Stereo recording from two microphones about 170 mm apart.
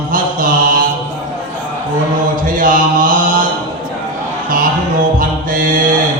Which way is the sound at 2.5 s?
50° right (ahead or behind).